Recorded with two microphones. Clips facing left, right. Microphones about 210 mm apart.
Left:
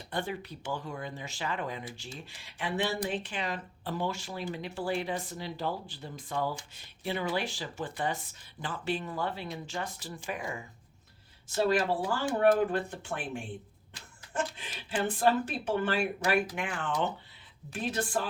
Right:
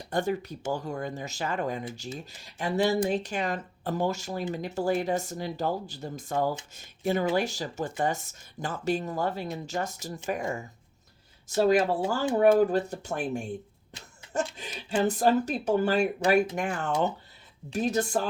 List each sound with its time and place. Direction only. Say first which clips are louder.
0.0 s speech: right 7 dB; 45° right (ahead or behind)
14.5 s speech: right 6 dB; 40° right (ahead or behind)